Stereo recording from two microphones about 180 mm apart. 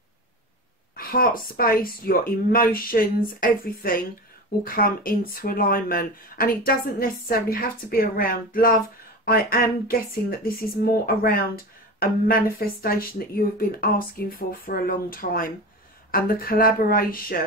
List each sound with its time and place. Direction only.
0.9 s speech: 55° left (ahead or behind)